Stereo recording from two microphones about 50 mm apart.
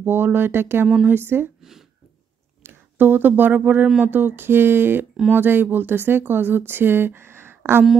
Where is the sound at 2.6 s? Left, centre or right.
Right.